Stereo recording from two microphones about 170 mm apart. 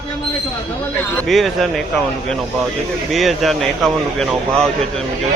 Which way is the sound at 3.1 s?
Centre (ahead or behind).